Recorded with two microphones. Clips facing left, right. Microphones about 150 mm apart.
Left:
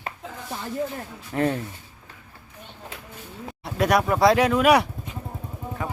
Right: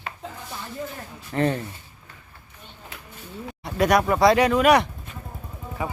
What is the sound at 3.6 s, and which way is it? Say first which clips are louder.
Speech: right 1 dB; centre (ahead or behind).